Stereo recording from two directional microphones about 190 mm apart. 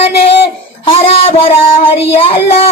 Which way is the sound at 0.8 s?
30° left (ahead or behind).